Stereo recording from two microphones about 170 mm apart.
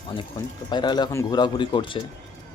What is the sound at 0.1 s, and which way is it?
Speech, 25° left (ahead or behind).